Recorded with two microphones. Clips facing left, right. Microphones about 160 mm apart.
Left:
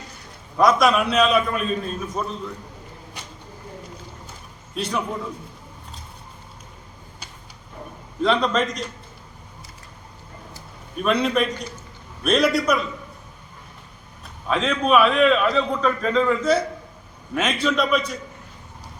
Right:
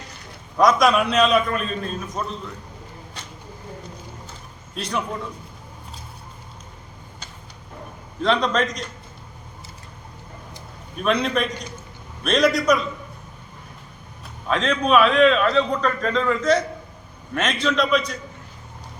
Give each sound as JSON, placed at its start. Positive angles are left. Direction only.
{"t": 0.5, "sound": "a man's voice", "side_deg": 0}
{"t": 3.2, "sound": "vehicle", "side_deg": 15}
{"t": 4.7, "sound": "a man's voice", "side_deg": 5}
{"t": 8.2, "sound": "a man's voice", "side_deg": 0}
{"t": 11.0, "sound": "a man's voice", "side_deg": 5}
{"t": 14.4, "sound": "a man's voice", "side_deg": 5}